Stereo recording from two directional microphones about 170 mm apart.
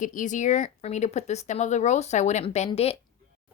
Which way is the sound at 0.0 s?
50° left (ahead or behind).